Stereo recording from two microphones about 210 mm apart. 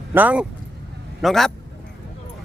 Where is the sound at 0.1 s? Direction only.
10° right (ahead or behind).